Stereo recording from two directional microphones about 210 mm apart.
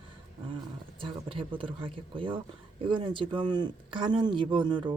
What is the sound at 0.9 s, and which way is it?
Speech, 25° right (ahead or behind).